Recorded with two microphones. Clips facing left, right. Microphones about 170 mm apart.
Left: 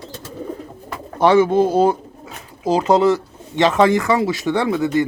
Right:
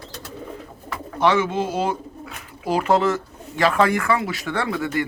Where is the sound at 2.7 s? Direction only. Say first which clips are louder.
Left 5 dB; 20° left (ahead or behind).